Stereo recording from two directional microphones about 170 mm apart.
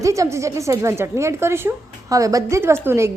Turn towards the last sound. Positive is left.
turn(degrees=-15)  # may be behind; listen again after turning